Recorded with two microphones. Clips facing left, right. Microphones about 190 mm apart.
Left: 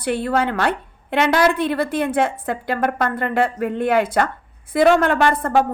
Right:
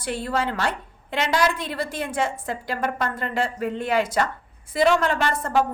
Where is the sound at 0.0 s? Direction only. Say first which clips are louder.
Left 6 dB; 60° left (ahead or behind).